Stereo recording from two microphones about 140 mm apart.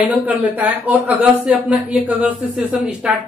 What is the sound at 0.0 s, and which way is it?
A woman's voice, 10° right (ahead or behind).